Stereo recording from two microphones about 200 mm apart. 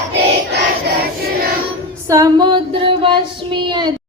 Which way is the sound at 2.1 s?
20° right (ahead or behind).